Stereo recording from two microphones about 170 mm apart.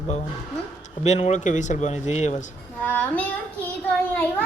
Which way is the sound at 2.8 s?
10° left (ahead or behind).